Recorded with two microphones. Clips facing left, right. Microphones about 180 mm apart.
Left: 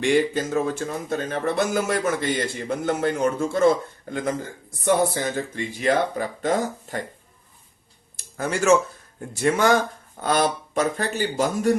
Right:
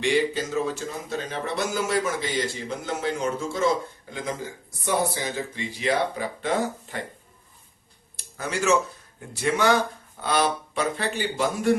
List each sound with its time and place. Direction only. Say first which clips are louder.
0.0 s speech: left 3 dB; 50° left (ahead or behind)
8.1 s a sound: left 4 dB; 50° left (ahead or behind)
9.3 s speech: left 3 dB; 45° left (ahead or behind)